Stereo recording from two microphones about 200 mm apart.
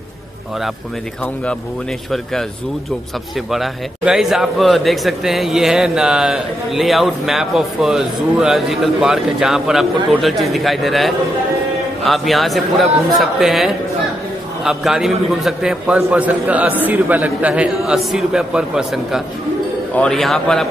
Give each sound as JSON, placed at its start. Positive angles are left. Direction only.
{"t": 1.2, "sound": "speech", "side_deg": 5}
{"t": 3.5, "sound": "a man's voice", "side_deg": 0}